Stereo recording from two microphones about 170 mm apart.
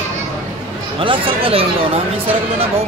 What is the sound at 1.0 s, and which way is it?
Chatter, 30° right (ahead or behind).